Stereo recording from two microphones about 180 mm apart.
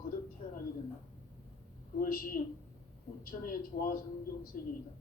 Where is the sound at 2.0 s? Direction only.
50° left (ahead or behind).